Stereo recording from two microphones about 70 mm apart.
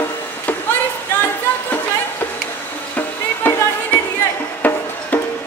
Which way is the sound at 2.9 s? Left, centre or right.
Left.